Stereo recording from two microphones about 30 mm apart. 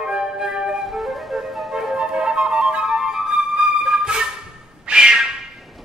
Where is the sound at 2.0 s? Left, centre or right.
Right.